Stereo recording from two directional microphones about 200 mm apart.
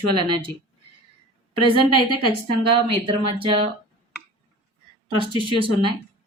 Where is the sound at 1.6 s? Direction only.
25° right (ahead or behind).